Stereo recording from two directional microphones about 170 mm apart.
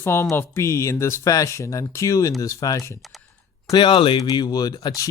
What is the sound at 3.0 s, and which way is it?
Typing, centre (ahead or behind).